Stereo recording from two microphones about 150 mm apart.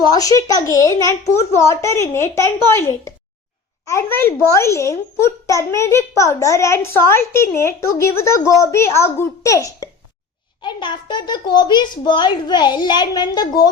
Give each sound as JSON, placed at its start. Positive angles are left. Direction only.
{"t": 0.1, "sound": "a child's voice", "side_deg": 25}